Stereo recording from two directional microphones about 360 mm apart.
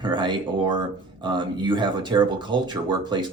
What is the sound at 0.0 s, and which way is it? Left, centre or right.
Speech, centre.